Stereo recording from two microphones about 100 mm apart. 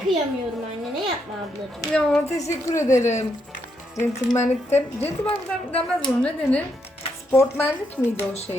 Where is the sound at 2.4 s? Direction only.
30° left (ahead or behind).